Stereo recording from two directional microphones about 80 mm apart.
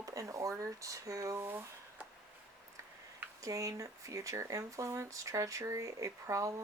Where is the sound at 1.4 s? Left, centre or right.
Right.